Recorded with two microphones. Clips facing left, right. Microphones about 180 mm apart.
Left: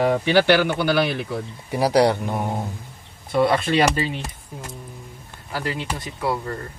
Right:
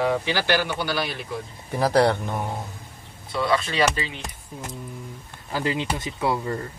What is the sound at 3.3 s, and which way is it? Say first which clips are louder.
Speech: left 5 dB; 55° left (ahead or behind).